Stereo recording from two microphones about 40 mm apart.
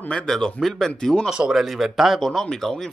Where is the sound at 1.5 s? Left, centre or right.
Centre.